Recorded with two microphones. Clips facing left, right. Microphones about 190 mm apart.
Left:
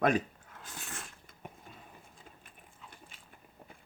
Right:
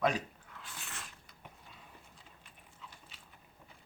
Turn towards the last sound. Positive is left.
turn(degrees=50)  # may be behind; listen again after turning